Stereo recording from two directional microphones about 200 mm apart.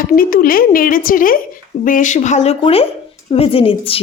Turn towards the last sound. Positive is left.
turn(degrees=30)  # may be behind; listen again after turning